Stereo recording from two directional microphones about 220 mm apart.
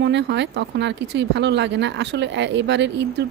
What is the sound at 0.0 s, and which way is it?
Speech, 50° right (ahead or behind).